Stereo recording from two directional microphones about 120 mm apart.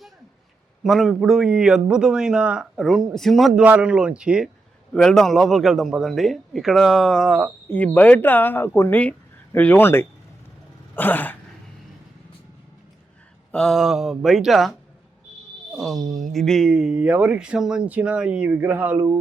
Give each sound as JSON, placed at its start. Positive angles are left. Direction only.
{"t": 0.9, "sound": "a man's voice", "side_deg": 0}
{"t": 4.9, "sound": "a man's voice", "side_deg": 5}
{"t": 7.7, "sound": "speech", "side_deg": 15}
{"t": 13.5, "sound": "a man's voice", "side_deg": 5}